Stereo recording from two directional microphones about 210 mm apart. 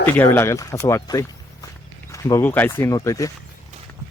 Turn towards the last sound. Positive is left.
turn(degrees=15)  # may be behind; listen again after turning